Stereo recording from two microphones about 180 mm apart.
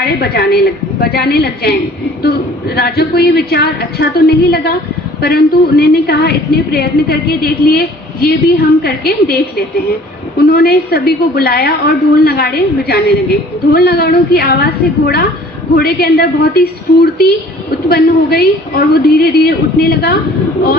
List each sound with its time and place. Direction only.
0.0 s a woman's voice: 60° left (ahead or behind)
10.4 s a woman's voice: 60° left (ahead or behind)